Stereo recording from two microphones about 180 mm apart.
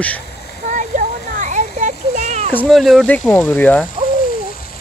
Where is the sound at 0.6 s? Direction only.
45° right (ahead or behind).